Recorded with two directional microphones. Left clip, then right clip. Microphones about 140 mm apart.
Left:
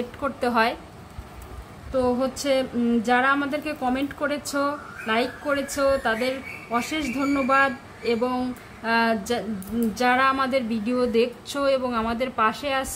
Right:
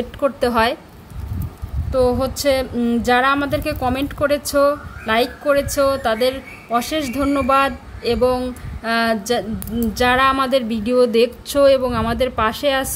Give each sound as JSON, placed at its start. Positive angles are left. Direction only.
{"t": 0.2, "sound": "a woman's voice", "side_deg": -45}
{"t": 1.9, "sound": "a woman's voice", "side_deg": -70}